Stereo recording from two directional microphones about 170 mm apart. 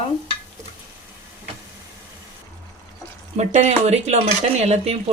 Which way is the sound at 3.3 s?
40° right (ahead or behind).